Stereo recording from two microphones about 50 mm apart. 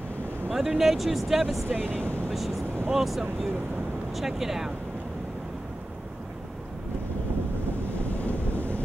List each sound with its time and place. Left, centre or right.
0.6 s speech: centre
2.9 s speech: centre
8.0 s wind noise: left